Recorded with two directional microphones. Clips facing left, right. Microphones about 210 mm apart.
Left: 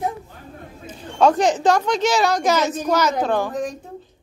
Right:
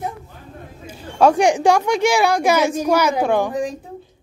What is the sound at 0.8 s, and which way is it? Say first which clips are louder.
Speech: right 2 dB; 10° right (ahead or behind).